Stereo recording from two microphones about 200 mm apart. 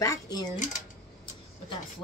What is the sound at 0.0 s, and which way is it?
Speech, 20° left (ahead or behind).